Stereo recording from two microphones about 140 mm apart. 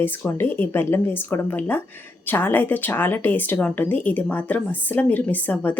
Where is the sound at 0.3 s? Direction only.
15° left (ahead or behind).